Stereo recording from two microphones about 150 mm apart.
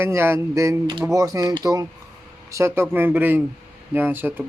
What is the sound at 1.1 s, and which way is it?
Mantra, 20° right (ahead or behind).